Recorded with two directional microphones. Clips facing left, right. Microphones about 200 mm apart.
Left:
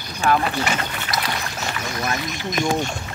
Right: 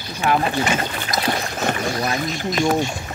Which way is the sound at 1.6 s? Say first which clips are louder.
Right 6 dB; 50° right (ahead or behind).